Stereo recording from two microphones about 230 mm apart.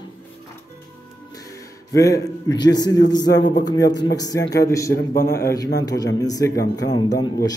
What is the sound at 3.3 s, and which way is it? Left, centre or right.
Speech, left.